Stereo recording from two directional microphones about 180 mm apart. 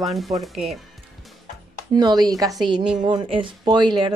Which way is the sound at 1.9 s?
20° right (ahead or behind).